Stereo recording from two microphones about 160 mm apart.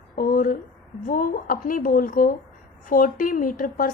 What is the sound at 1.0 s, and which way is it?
A woman's voice, 60° left (ahead or behind).